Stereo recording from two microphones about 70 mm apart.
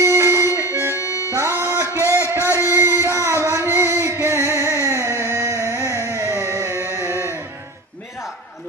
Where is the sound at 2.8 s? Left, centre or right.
Right.